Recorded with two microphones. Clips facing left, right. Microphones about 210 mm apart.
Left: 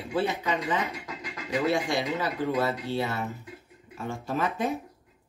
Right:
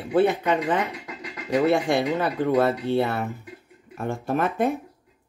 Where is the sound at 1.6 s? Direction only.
55° right (ahead or behind).